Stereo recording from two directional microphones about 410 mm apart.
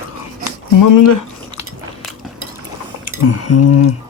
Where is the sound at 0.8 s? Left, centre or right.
Left.